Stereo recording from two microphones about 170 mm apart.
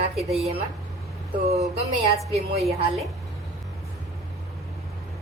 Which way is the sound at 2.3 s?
35° right (ahead or behind).